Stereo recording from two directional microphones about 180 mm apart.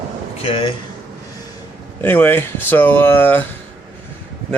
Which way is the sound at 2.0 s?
10° left (ahead or behind).